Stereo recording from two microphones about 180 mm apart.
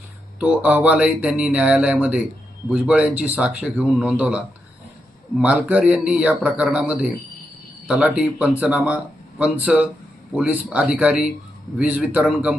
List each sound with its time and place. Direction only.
0.3 s speech: 10° right (ahead or behind)